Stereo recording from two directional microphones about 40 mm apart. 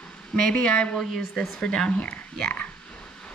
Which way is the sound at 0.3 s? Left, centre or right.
Left.